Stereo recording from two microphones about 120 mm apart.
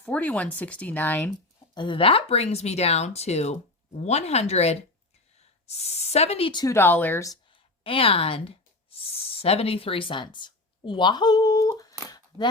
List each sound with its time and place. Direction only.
0.0 s speech: 10° left (ahead or behind)
1.7 s speech: 45° left (ahead or behind)
6.7 s speech: 20° left (ahead or behind)
7.9 s speech: 50° left (ahead or behind); by 12.5 s 30° left (ahead or behind)